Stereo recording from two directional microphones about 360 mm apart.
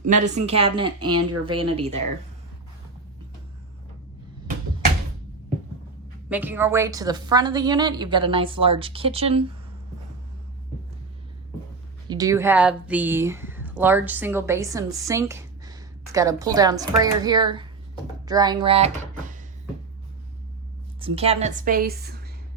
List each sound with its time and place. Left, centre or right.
0.2 s a woman's voice: centre
6.2 s speech: centre
12.0 s speech: centre
21.0 s a woman's voice: centre